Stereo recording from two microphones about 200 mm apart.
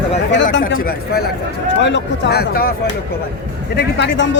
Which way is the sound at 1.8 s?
60° left (ahead or behind).